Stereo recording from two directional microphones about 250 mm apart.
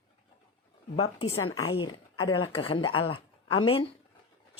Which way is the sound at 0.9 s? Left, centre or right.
Left.